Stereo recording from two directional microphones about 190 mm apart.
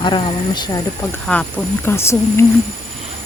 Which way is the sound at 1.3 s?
5° left (ahead or behind).